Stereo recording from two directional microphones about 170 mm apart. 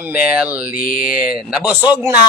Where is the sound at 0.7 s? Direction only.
55° left (ahead or behind).